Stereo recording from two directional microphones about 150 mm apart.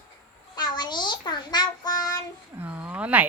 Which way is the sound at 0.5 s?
30° left (ahead or behind).